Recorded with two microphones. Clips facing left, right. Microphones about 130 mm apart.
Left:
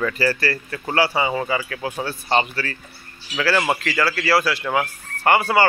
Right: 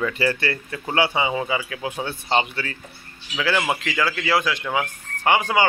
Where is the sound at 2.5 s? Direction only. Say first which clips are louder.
Left 2 dB; 20° right (ahead or behind).